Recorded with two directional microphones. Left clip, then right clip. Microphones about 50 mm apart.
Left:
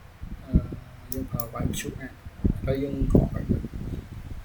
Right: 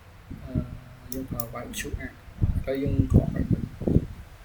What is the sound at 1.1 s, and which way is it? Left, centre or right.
Speech, left.